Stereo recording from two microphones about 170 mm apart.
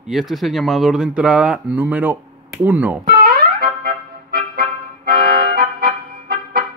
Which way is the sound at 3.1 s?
60° right (ahead or behind).